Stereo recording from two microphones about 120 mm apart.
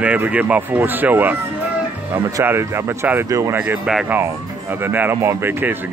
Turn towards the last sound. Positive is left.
turn(degrees=-20)  # may be behind; listen again after turning